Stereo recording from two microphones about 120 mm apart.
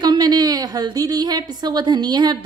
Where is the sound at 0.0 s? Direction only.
35° right (ahead or behind).